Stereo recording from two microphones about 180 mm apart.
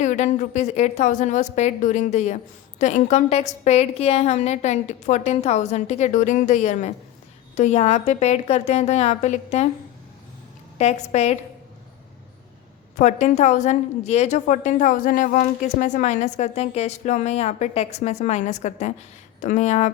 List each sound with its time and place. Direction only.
0.0 s a woman's voice: 45° left (ahead or behind)
10.8 s a woman's voice: 35° left (ahead or behind)
13.0 s a woman's voice: 40° left (ahead or behind)